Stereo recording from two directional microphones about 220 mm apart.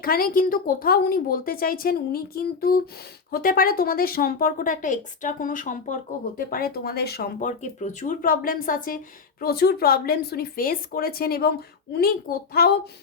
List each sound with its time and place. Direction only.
0.0 s a woman's voice: 40° left (ahead or behind)